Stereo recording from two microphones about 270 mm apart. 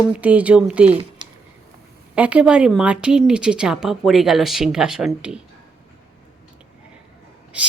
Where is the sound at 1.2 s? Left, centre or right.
Centre.